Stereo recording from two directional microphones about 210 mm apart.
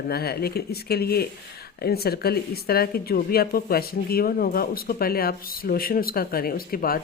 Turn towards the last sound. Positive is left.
turn(degrees=45)  # may be behind; listen again after turning